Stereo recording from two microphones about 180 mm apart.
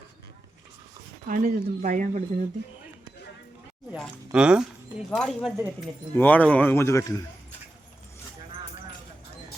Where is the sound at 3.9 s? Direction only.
5° right (ahead or behind).